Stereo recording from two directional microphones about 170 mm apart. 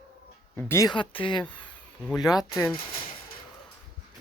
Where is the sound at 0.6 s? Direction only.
15° left (ahead or behind).